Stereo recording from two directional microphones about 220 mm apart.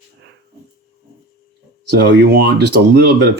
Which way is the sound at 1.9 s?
50° right (ahead or behind).